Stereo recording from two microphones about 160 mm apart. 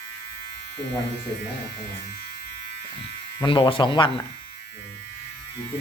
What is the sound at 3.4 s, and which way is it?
Speech, 30° left (ahead or behind).